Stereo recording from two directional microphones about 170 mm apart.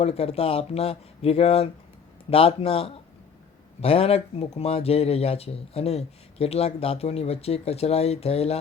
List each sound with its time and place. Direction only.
0.0 s speech: 35° left (ahead or behind)